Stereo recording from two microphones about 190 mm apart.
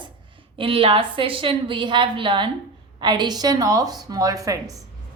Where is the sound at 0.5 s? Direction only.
30° right (ahead or behind).